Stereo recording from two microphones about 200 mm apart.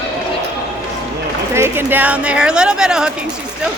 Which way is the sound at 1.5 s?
10° right (ahead or behind).